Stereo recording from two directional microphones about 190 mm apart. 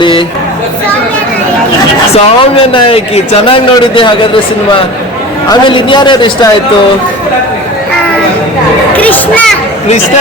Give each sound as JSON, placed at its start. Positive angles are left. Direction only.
{"t": 0.0, "sound": "a sound", "side_deg": 25}
{"t": 2.1, "sound": "a man's voice", "side_deg": 25}
{"t": 5.5, "sound": "a man's voice", "side_deg": 25}
{"t": 9.0, "sound": "a child's voice", "side_deg": 10}